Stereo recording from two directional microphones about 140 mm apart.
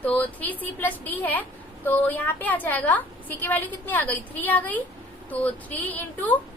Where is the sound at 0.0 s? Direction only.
10° left (ahead or behind).